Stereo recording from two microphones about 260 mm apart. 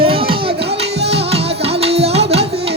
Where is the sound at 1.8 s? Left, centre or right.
Right.